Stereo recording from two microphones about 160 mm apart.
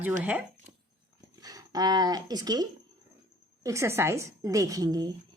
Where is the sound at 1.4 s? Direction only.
25° right (ahead or behind).